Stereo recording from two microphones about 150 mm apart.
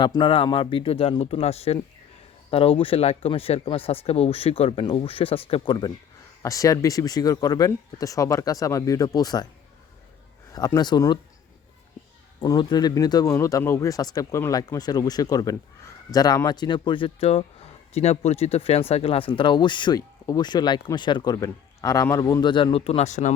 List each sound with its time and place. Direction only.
0.0 s speech: 30° left (ahead or behind)
10.5 s speech: 25° left (ahead or behind)
12.4 s speech: 30° left (ahead or behind); by 23.3 s 55° left (ahead or behind)